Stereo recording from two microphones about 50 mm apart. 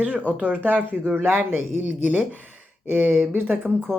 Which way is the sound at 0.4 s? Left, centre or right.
Right.